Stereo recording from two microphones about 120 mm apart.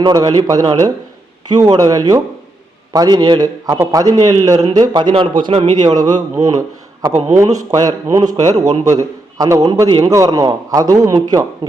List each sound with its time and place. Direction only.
0.0 s a man's voice: 35° right (ahead or behind)
5.8 s a man's voice: 30° right (ahead or behind)
7.1 s a man's voice: 70° right (ahead or behind)
7.3 s a man's voice: 30° right (ahead or behind)